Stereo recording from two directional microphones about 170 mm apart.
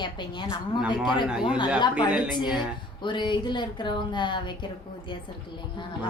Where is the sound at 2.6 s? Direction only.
25° left (ahead or behind).